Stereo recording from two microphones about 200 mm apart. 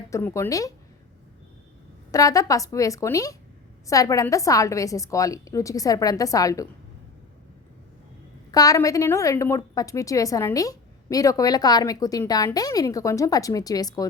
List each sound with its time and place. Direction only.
0.1 s a woman's voice: 15° left (ahead or behind)
2.1 s a woman's voice: 15° left (ahead or behind)
8.4 s a woman's voice: 20° left (ahead or behind)